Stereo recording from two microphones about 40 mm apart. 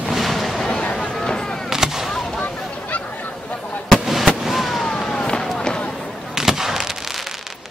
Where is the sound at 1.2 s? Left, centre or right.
Centre.